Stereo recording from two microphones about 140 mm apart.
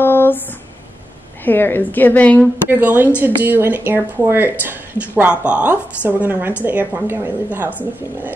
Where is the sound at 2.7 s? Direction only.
10° right (ahead or behind).